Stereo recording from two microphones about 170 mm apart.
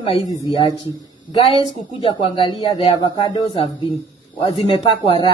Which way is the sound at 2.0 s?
30° left (ahead or behind).